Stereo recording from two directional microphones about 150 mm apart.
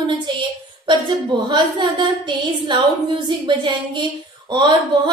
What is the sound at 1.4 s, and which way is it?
A woman's voice, 30° right (ahead or behind).